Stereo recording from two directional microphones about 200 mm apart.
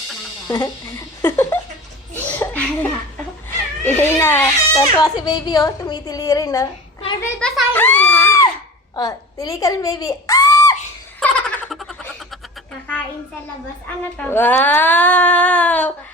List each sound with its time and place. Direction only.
0.4 s a child's voice: 15° left (ahead or behind)
2.1 s laughter: 10° left (ahead or behind)
3.8 s a child's voice: 10° left (ahead or behind)
7.2 s a child's voice: 5° left (ahead or behind)
11.2 s a sound: 5° left (ahead or behind)
14.3 s a child's voice: 10° left (ahead or behind)